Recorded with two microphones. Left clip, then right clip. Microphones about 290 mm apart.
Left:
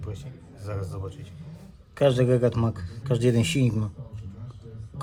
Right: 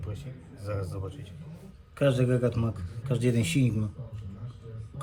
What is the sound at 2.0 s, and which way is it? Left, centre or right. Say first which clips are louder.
Speech: left 5 dB; centre.